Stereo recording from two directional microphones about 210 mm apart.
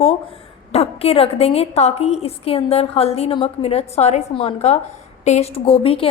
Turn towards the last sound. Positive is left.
turn(degrees=25)  # may be behind; listen again after turning